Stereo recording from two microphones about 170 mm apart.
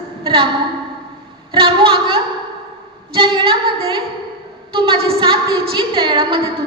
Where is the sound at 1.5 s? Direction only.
30° right (ahead or behind).